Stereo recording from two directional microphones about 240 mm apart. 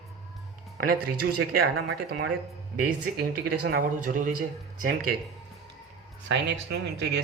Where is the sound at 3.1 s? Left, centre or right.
Right.